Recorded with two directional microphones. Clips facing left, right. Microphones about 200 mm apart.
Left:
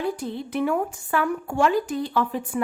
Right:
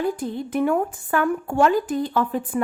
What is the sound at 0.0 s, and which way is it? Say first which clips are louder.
A woman's voice: right 3 dB; 50° right (ahead or behind).